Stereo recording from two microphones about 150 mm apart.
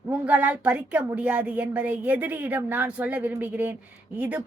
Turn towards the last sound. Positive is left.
turn(degrees=-10)  # may be behind; listen again after turning